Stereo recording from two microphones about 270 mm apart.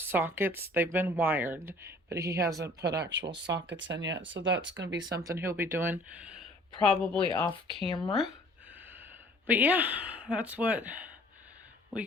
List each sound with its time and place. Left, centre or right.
0.0 s speech: centre
2.8 s speech: right
4.9 s speech: centre
7.3 s speech: centre
9.5 s speech: centre